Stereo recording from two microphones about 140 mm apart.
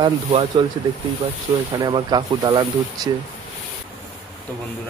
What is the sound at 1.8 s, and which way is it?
Speech, 30° right (ahead or behind).